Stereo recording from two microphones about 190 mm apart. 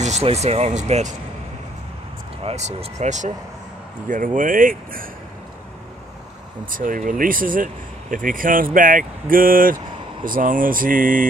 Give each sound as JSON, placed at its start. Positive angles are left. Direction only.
{"t": 0.0, "sound": "speech", "side_deg": -35}
{"t": 2.4, "sound": "speech", "side_deg": -35}
{"t": 6.7, "sound": "speech", "side_deg": -45}